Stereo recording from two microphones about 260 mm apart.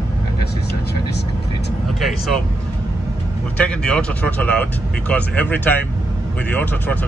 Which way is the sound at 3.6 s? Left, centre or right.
Centre.